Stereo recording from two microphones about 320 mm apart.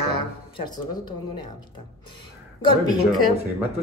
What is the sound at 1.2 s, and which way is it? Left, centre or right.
Speech, left.